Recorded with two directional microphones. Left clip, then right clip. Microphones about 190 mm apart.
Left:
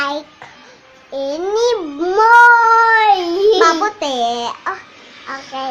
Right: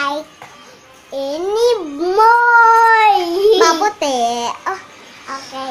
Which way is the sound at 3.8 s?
10° right (ahead or behind).